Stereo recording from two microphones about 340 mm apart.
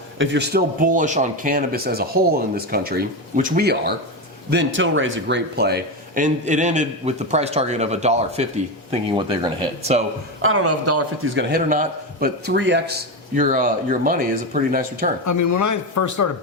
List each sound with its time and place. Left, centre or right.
0.2 s speech: right
10.4 s speech: right
15.3 s a man's voice: left